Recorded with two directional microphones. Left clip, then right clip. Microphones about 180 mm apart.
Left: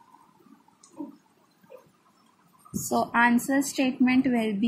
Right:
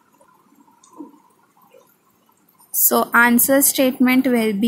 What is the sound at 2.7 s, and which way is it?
A woman's voice, 25° right (ahead or behind).